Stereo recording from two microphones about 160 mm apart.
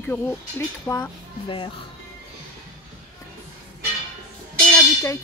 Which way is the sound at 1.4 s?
30° left (ahead or behind).